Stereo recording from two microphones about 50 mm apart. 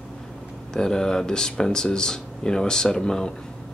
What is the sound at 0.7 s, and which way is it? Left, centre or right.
Speech, centre.